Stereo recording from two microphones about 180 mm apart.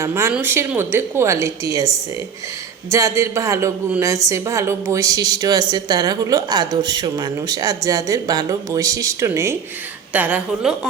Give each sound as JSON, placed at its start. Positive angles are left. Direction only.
{"t": 0.0, "sound": "a woman's voice", "side_deg": -15}
{"t": 2.9, "sound": "a woman's voice", "side_deg": -15}